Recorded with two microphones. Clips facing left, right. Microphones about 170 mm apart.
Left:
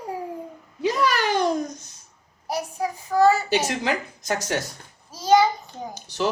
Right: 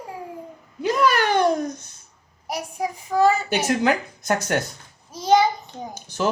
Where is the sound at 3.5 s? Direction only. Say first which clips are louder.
Right 3 dB; 55° right (ahead or behind).